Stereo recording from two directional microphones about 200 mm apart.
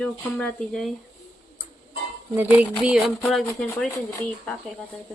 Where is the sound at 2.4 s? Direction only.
10° right (ahead or behind); by 4.2 s 10° left (ahead or behind).